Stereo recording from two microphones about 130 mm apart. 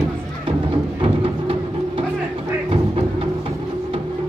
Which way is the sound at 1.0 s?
45° right (ahead or behind).